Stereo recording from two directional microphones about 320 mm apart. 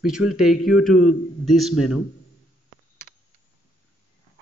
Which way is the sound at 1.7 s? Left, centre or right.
Left.